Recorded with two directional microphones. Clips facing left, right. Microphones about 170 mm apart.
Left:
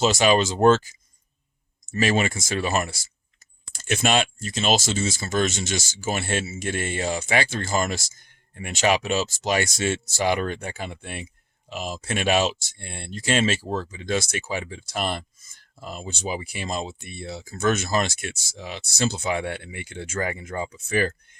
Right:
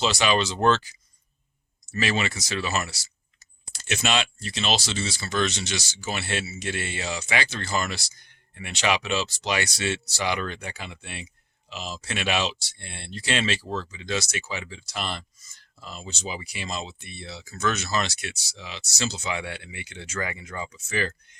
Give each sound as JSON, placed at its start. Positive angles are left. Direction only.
{"t": 0.0, "sound": "speech", "side_deg": 45}
{"t": 2.0, "sound": "speech", "side_deg": 45}